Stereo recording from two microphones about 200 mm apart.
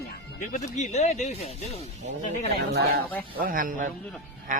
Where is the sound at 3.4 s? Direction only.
45° right (ahead or behind).